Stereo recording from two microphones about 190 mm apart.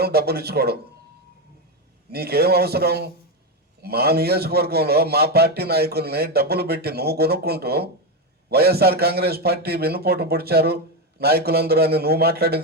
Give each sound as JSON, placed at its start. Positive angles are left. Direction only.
{"t": 0.0, "sound": "a man's voice", "side_deg": -55}
{"t": 2.0, "sound": "a man's voice", "side_deg": -55}